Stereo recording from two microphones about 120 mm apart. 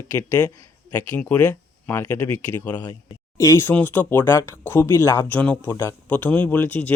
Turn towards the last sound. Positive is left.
turn(degrees=15)  # may be behind; listen again after turning